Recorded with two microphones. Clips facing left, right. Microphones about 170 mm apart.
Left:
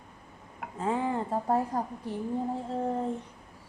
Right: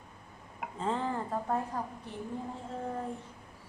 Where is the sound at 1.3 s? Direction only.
35° left (ahead or behind).